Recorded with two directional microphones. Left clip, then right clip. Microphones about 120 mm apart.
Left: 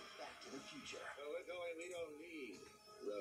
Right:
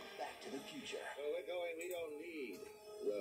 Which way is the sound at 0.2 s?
40° right (ahead or behind).